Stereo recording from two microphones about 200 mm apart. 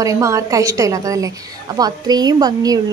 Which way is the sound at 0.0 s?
15° right (ahead or behind).